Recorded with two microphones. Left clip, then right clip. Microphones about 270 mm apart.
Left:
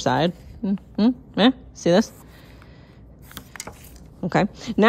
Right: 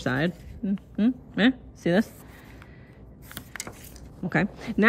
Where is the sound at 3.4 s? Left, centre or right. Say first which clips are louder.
Left 1 dB; centre.